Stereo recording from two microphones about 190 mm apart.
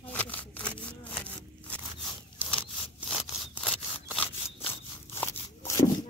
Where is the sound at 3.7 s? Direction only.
5° left (ahead or behind).